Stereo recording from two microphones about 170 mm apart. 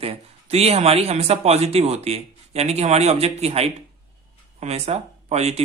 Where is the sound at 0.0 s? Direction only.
35° right (ahead or behind).